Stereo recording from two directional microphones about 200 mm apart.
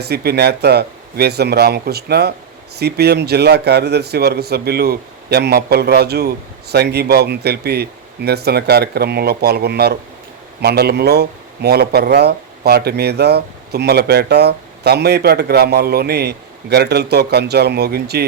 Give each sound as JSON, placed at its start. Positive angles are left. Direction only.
{"t": 0.0, "sound": "speech", "side_deg": -55}